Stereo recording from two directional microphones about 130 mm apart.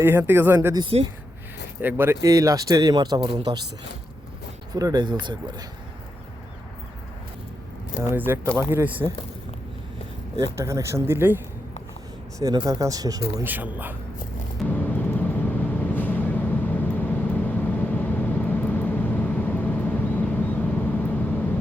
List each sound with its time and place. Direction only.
0.0 s speech: 15° right (ahead or behind)
0.9 s speech: 50° right (ahead or behind)
1.8 s speech: 15° right (ahead or behind); by 3.6 s 35° right (ahead or behind)
4.7 s speech: 30° right (ahead or behind)
8.0 s speech: 15° right (ahead or behind)
10.3 s speech: 25° right (ahead or behind)
12.4 s speech: 30° right (ahead or behind)
13.4 s speech: 15° right (ahead or behind)
14.7 s vehicle: 15° left (ahead or behind)